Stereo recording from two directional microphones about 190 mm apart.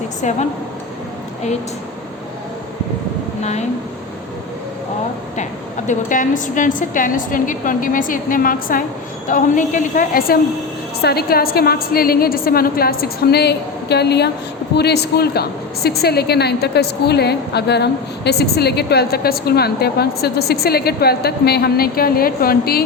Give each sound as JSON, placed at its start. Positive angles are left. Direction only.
{"t": 0.2, "sound": "a woman's voice", "side_deg": 40}
{"t": 3.4, "sound": "a woman's voice", "side_deg": 35}
{"t": 5.4, "sound": "a woman's voice", "side_deg": 40}